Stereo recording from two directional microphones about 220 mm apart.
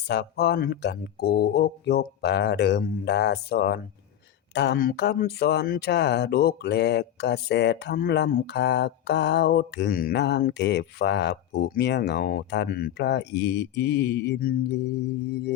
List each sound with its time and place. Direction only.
0.1 s speech: 50° left (ahead or behind)